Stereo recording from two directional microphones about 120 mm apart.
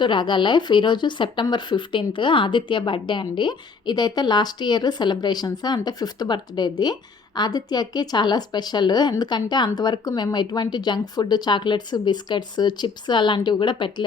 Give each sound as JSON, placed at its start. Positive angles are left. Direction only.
{"t": 0.0, "sound": "speech", "side_deg": 40}